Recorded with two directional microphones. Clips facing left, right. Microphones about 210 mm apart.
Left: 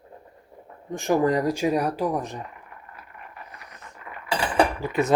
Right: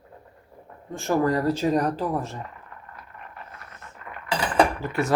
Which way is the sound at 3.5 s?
15° left (ahead or behind).